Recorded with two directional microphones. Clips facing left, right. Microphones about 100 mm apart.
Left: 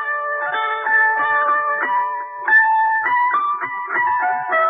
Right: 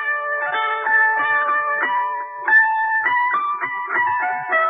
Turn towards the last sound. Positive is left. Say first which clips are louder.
# left 3 dB
turn(degrees=25)  # may be behind; listen again after turning